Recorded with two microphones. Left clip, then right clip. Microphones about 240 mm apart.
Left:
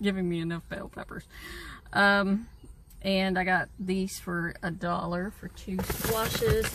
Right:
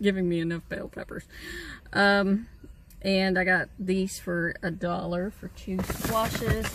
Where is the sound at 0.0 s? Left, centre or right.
Centre.